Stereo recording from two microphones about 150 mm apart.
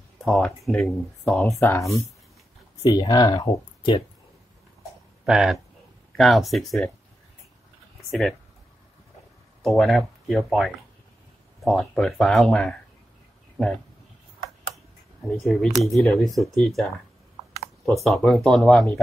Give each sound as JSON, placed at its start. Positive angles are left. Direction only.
{"t": 0.2, "sound": "speech", "side_deg": 5}
{"t": 5.2, "sound": "speech", "side_deg": 0}
{"t": 8.1, "sound": "speech", "side_deg": 0}
{"t": 9.6, "sound": "speech", "side_deg": 0}
{"t": 15.2, "sound": "speech", "side_deg": 0}
{"t": 18.0, "sound": "speech", "side_deg": 0}